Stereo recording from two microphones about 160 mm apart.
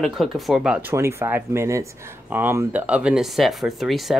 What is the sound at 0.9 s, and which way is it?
Speech, 15° right (ahead or behind).